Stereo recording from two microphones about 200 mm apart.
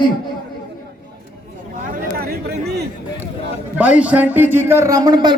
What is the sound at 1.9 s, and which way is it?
Chatter, 50° right (ahead or behind).